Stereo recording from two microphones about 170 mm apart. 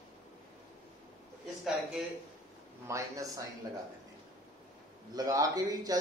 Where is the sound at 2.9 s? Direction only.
20° right (ahead or behind).